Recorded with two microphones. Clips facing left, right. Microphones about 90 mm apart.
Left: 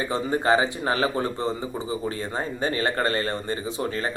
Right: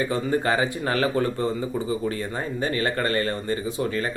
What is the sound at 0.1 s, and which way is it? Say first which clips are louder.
A man's voice: left 1 dB; 25° left (ahead or behind).